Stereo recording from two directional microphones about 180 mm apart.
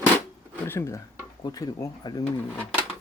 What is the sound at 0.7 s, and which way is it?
Speech, 15° left (ahead or behind).